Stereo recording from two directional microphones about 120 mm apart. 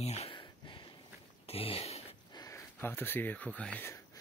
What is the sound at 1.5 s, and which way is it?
Speech, 55° left (ahead or behind).